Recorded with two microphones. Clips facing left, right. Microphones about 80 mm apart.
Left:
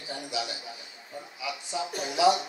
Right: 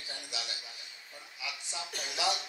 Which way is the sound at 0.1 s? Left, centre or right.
Centre.